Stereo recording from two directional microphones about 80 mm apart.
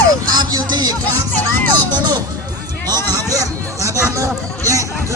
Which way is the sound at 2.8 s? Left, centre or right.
Right.